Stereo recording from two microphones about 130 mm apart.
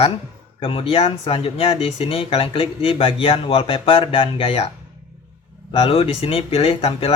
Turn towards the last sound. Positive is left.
turn(degrees=45)  # may be behind; listen again after turning